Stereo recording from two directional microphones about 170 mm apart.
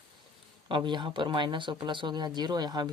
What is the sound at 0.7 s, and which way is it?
Speech, 25° right (ahead or behind).